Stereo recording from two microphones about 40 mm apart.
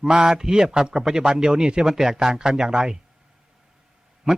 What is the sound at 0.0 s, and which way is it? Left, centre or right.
A man's voice, centre.